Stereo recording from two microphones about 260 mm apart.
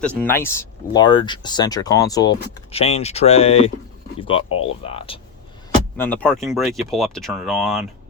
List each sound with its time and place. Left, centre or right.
0.2 s speech: centre
6.0 s speech: centre